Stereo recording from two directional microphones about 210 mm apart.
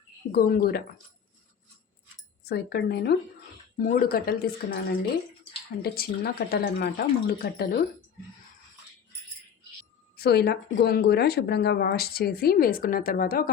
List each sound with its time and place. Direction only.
0.3 s speech: 50° left (ahead or behind)
2.5 s speech: 50° left (ahead or behind)
10.2 s speech: 50° left (ahead or behind)